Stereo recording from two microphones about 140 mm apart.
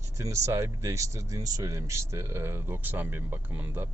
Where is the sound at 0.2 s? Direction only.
20° right (ahead or behind).